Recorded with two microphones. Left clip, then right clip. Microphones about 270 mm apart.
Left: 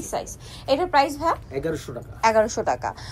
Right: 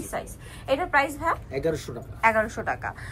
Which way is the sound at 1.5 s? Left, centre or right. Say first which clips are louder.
Even; centre.